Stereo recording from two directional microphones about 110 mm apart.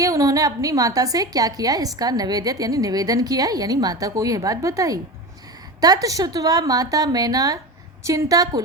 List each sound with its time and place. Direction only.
0.0 s a woman's voice: 30° right (ahead or behind)